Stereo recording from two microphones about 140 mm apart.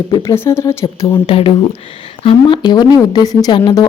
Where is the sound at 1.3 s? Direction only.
45° left (ahead or behind).